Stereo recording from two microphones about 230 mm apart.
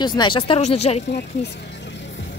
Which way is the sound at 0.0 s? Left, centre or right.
Centre.